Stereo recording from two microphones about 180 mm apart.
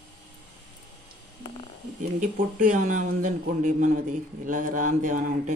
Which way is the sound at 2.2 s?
50° right (ahead or behind).